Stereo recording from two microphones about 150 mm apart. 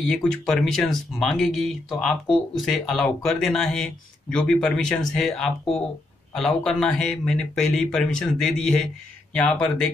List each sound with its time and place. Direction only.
0.1 s speech: 5° left (ahead or behind)